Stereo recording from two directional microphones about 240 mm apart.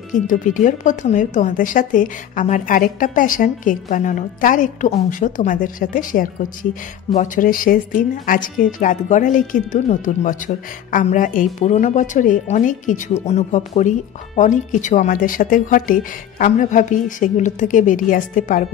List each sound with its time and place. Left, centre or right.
0.3 s speech: left